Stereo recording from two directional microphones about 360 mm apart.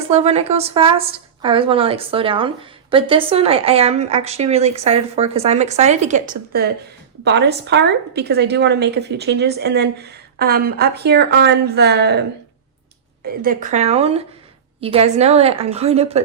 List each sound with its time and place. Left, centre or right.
0.1 s a woman's voice: centre
13.2 s a woman's voice: right